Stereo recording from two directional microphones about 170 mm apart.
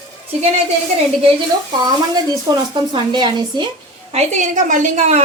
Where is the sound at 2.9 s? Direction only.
25° right (ahead or behind).